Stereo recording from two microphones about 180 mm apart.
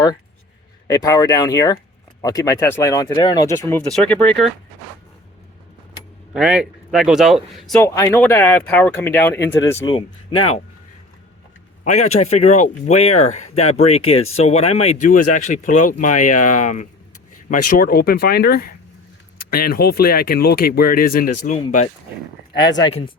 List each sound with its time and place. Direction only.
0.9 s speech: 20° left (ahead or behind); by 4.5 s 5° left (ahead or behind)
6.3 s speech: 5° right (ahead or behind)
7.8 s speech: 15° left (ahead or behind)
9.8 s speech: 25° left (ahead or behind)
11.9 s speech: 40° left (ahead or behind)
22.8 s speech: 30° left (ahead or behind)